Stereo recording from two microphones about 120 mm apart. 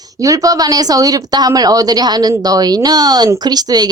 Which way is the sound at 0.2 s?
30° right (ahead or behind).